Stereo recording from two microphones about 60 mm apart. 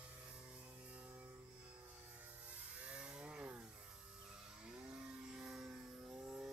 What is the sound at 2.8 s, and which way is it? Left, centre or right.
Chainsaw, centre.